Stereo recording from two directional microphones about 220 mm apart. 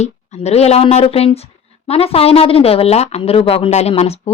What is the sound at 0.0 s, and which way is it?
Speech, 30° left (ahead or behind).